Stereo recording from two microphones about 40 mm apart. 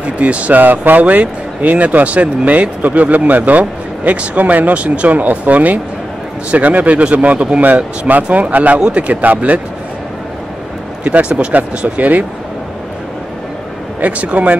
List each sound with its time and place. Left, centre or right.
0.0 s speech: right
0.6 s speech: right
11.1 s speech: right
14.0 s speech: right